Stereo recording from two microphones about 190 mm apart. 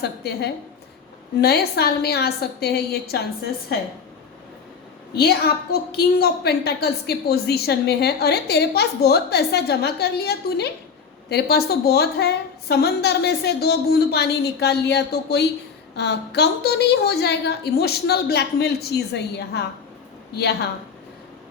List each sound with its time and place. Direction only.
0.0 s a woman's voice: 60° left (ahead or behind)
5.1 s a woman's voice: 55° left (ahead or behind)